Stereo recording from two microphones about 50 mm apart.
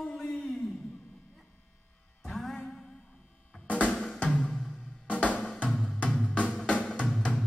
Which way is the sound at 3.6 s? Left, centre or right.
Left.